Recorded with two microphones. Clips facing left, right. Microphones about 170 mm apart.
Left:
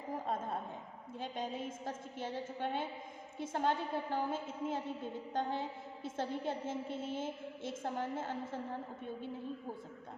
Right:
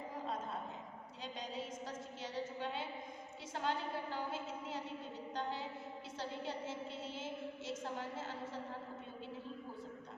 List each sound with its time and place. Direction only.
1.2 s a woman's voice: 50° left (ahead or behind)